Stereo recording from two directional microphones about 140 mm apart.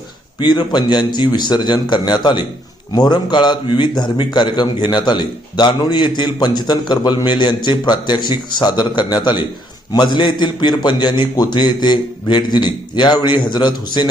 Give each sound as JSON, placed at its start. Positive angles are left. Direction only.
{"t": 0.3, "sound": "a man's voice", "side_deg": 30}